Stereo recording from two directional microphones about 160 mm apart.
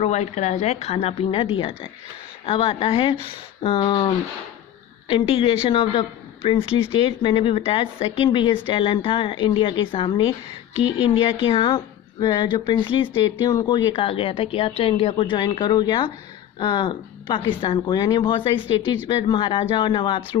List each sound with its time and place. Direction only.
0.0 s a man's voice: 45° left (ahead or behind)